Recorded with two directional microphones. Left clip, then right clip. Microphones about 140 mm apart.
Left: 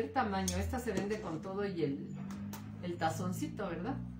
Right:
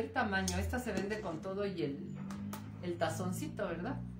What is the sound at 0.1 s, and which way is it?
Speech, 15° right (ahead or behind).